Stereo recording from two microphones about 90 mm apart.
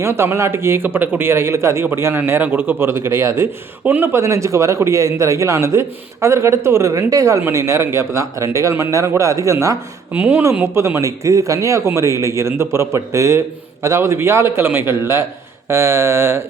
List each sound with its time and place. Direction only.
0.0 s speech: 30° right (ahead or behind)
10.1 s speech: 20° right (ahead or behind)
10.8 s speech: 30° right (ahead or behind)